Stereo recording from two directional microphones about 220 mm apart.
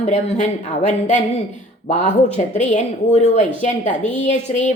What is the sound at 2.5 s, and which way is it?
Speech, 30° left (ahead or behind).